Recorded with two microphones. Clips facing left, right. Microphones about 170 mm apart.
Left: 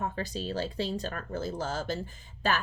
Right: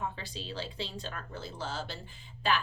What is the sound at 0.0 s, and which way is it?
A woman's voice, 45° left (ahead or behind).